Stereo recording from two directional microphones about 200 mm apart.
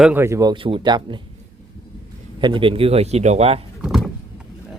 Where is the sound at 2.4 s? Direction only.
25° right (ahead or behind).